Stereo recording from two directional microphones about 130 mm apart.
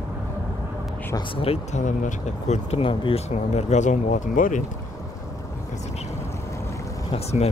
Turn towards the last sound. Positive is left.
turn(degrees=55)  # may be behind; listen again after turning